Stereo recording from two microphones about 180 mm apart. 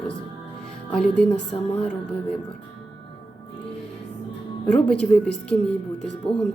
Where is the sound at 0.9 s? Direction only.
5° left (ahead or behind).